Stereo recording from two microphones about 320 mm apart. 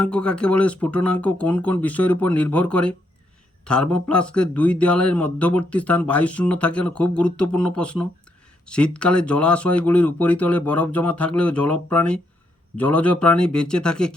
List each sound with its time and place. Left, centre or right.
0.0 s a man's voice: centre